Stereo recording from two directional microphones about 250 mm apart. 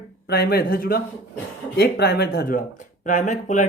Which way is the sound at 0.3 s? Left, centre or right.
Left.